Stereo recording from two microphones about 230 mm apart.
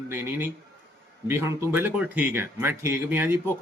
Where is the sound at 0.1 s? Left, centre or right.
Centre.